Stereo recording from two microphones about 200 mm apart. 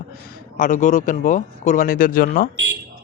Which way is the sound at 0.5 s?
40° left (ahead or behind).